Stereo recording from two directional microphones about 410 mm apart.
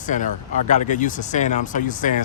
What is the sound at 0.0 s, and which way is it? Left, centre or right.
Speech, centre.